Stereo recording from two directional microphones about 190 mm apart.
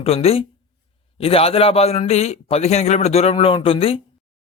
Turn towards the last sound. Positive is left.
turn(degrees=30)  # may be behind; listen again after turning